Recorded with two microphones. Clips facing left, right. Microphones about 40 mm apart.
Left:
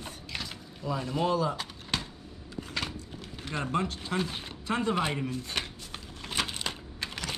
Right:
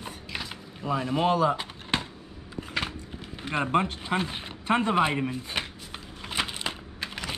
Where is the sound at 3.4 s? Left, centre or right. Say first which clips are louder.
Right 5 dB; right.